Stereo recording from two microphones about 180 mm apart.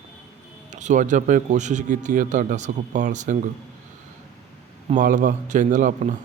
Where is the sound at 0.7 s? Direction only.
40° right (ahead or behind).